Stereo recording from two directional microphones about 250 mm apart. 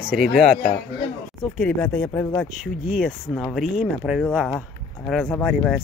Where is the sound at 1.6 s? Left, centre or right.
Centre.